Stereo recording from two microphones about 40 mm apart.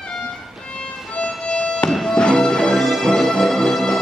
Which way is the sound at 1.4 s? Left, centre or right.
Centre.